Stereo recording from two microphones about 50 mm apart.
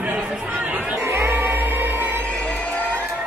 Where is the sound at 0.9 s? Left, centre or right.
Right.